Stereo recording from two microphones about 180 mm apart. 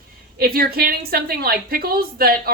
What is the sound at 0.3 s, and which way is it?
Speech, 55° right (ahead or behind).